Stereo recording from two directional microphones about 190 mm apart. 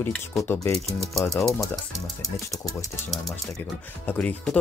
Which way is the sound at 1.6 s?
Centre (ahead or behind).